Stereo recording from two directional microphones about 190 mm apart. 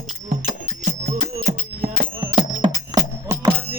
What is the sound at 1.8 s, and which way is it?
Music, 25° right (ahead or behind).